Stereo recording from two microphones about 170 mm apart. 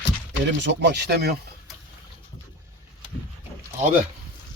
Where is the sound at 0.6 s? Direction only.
85° right.